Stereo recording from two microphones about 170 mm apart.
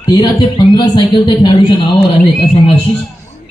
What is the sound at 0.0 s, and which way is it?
Speech, 25° left (ahead or behind).